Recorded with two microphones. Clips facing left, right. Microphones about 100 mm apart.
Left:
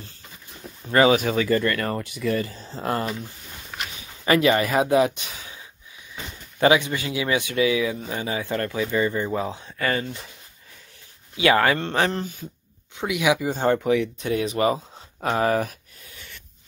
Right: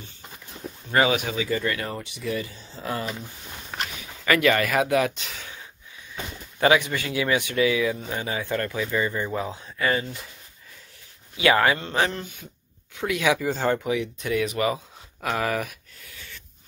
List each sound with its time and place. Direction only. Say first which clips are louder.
0.8 s speech: left 4 dB; 35° left (ahead or behind)
4.2 s speech: left 2 dB; 25° left (ahead or behind)
6.6 s speech: left 1 dB; 25° left (ahead or behind)
9.8 s speech: right 1 dB; 45° left (ahead or behind)
11.8 s speech: left 2 dB; 40° left (ahead or behind)
12.9 s speech: left 1 dB; 15° left (ahead or behind)
13.7 s speech: left 5 dB; 40° left (ahead or behind)
14.2 s speech: left 2 dB; 30° left (ahead or behind)
15.2 s a sound: left 4 dB; 30° left (ahead or behind)